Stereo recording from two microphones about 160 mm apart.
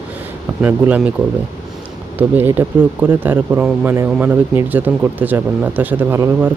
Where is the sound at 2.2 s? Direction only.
15° right (ahead or behind).